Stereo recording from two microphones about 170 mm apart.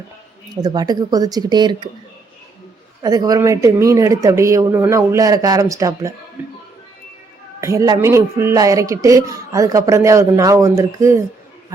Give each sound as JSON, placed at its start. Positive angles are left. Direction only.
{"t": 0.5, "sound": "speech", "side_deg": -25}
{"t": 3.0, "sound": "speech", "side_deg": -25}
{"t": 7.6, "sound": "speech", "side_deg": -20}